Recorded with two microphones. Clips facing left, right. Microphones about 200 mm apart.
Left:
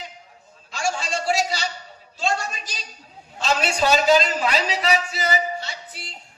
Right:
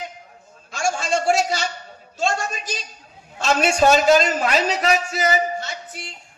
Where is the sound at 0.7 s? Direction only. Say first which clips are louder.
Right 4 dB; 45° right (ahead or behind).